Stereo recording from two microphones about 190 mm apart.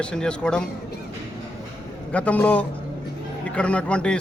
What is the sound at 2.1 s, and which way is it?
A man's voice, 5° left (ahead or behind).